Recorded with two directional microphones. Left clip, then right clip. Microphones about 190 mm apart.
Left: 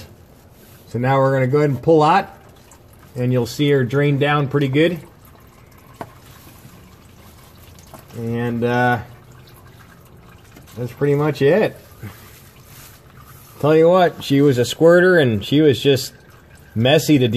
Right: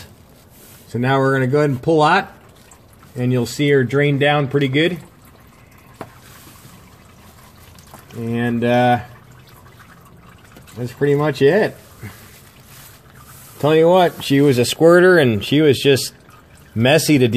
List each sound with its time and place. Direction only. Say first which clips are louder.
0.9 s speech: even; 30° right (ahead or behind)
3.6 s speech: right 2 dB; 75° right (ahead or behind)
4.0 s speech: right 2 dB; 20° right (ahead or behind)
8.3 s speech: right 2 dB; 35° right (ahead or behind)
11.0 s speech: right 1 dB; 30° right (ahead or behind)
13.6 s speech: even; 30° right (ahead or behind)